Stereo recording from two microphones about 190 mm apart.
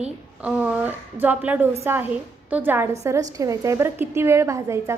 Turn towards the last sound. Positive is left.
turn(degrees=-15)  # may be behind; listen again after turning